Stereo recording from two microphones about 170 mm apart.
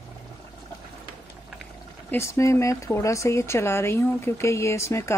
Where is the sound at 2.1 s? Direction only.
15° left (ahead or behind).